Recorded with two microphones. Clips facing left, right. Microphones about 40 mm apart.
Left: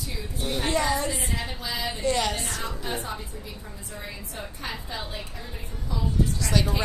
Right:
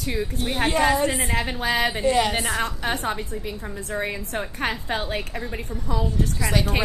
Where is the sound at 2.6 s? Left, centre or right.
Right.